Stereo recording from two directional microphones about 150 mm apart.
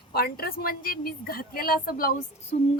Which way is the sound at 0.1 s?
90° left.